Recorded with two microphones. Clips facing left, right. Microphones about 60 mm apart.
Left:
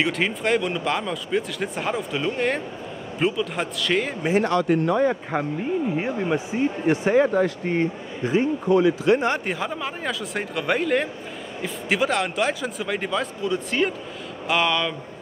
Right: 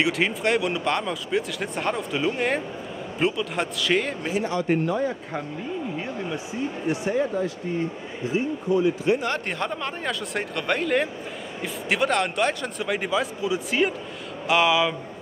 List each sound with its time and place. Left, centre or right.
0.0 s speech: centre
4.4 s speech: left
5.9 s speech: left
7.2 s speech: left
7.6 s speech: left
9.5 s speech: centre